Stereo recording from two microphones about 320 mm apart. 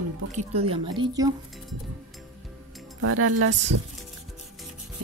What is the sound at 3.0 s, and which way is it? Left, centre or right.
Speech, right.